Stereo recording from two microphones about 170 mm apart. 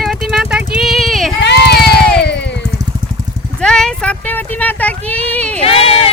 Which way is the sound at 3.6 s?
5° left (ahead or behind).